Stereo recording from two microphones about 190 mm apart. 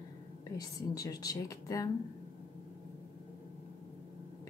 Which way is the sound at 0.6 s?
20° left (ahead or behind).